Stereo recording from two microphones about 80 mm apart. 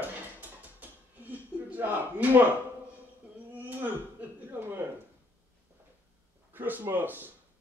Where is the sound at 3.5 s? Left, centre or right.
Right.